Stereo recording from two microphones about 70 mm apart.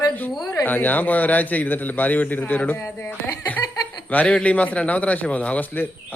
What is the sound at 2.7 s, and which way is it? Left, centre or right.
Speech, left.